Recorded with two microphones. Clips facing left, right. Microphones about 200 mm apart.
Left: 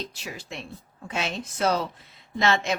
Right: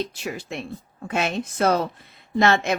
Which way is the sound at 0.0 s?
55° right (ahead or behind).